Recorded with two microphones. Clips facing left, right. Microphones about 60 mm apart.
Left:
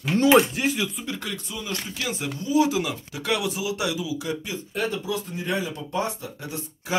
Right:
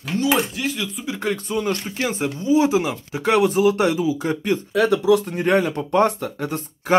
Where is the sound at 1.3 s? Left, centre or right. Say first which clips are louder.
Right 9 dB; right.